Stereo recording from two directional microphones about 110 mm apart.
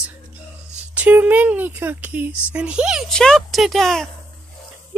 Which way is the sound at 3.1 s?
5° left (ahead or behind).